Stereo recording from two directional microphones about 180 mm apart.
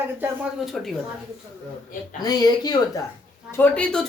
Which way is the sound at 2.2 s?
20° left (ahead or behind).